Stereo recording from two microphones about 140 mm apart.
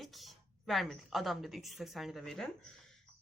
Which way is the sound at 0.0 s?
Centre (ahead or behind).